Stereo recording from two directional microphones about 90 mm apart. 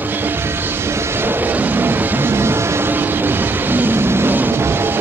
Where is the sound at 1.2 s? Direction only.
20° right (ahead or behind).